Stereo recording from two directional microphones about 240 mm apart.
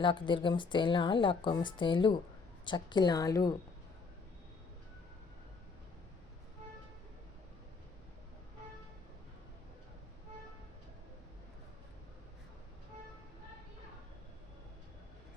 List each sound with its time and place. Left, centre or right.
0.0 s a woman's voice: centre